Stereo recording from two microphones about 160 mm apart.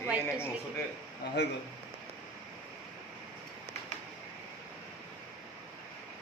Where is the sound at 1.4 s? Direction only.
90° left.